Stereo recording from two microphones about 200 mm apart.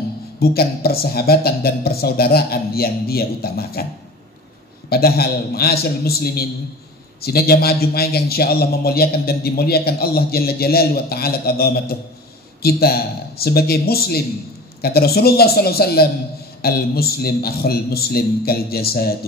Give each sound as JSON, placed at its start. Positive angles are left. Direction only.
{"t": 0.4, "sound": "a man's voice", "side_deg": 50}
{"t": 4.8, "sound": "a man's voice", "side_deg": 50}